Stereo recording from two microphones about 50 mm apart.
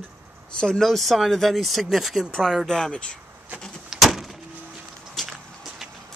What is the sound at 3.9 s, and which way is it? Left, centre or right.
Vehicle, centre.